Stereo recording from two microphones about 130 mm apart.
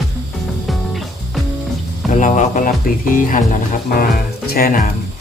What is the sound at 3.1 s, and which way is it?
Speech, 90° left.